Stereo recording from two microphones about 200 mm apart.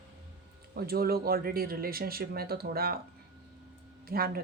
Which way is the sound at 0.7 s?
50° right (ahead or behind).